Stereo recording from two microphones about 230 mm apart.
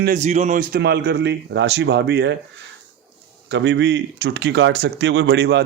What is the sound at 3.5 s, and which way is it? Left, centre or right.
Speech, right.